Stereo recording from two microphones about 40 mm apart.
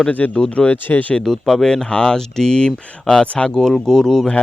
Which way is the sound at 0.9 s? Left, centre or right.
Left.